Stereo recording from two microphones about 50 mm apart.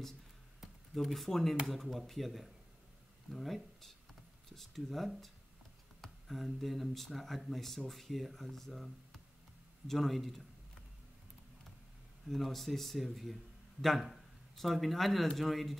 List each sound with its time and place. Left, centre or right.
0.9 s speech: centre
12.3 s speech: centre